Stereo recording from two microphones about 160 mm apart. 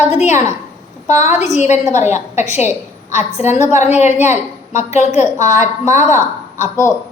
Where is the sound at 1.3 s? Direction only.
45° left (ahead or behind).